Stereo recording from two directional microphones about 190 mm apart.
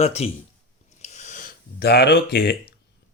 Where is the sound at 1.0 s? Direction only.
40° left (ahead or behind); by 2.5 s 55° left (ahead or behind).